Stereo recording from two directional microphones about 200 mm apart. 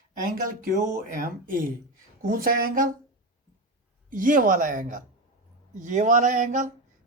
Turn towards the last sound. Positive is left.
turn(degrees=-40)  # may be behind; listen again after turning